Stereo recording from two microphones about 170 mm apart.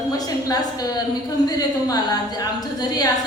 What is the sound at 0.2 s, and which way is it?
A woman's voice, 20° left (ahead or behind).